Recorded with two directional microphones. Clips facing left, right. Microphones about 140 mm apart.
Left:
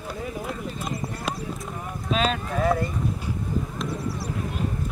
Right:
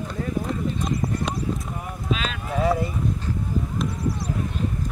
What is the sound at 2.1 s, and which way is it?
Clip-clop, 40° left (ahead or behind).